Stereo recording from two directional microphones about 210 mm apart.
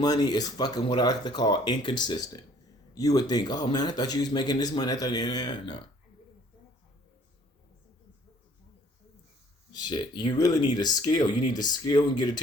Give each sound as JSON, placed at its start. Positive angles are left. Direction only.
{"t": 0.0, "sound": "a man's voice", "side_deg": 20}
{"t": 9.7, "sound": "a man's voice", "side_deg": 20}